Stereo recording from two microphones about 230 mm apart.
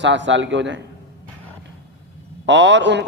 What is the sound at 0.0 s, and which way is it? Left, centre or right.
Speech, right.